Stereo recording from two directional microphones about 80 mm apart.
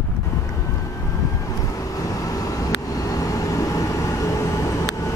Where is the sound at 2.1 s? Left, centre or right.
Left.